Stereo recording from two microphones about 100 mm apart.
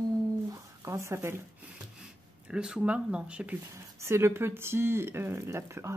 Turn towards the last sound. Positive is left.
turn(degrees=-30)  # may be behind; listen again after turning